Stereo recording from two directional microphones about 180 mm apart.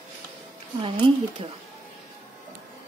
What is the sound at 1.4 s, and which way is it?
Speech, 35° right (ahead or behind).